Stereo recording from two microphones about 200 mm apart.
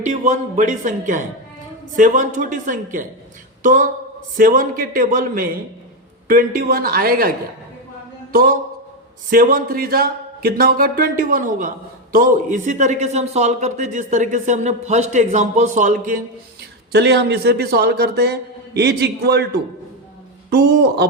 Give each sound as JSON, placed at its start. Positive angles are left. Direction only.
{"t": 0.0, "sound": "a man's voice", "side_deg": -35}
{"t": 16.9, "sound": "a man's voice", "side_deg": -60}
{"t": 20.5, "sound": "speech", "side_deg": -55}